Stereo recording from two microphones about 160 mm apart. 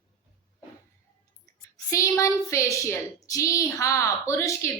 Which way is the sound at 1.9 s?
20° left (ahead or behind).